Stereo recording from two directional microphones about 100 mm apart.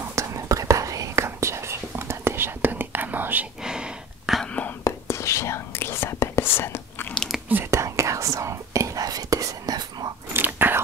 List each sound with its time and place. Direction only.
0.1 s whispering: 30° right (ahead or behind)
3.6 s a sound: 5° right (ahead or behind)
4.4 s whispering: 10° left (ahead or behind)
4.8 s whispering: 30° left (ahead or behind)
7.4 s whispering: 20° right (ahead or behind)
7.8 s whispering: 30° right (ahead or behind)
10.3 s biting: 20° right (ahead or behind)